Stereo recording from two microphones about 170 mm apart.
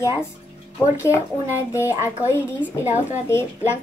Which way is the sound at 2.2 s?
15° left (ahead or behind).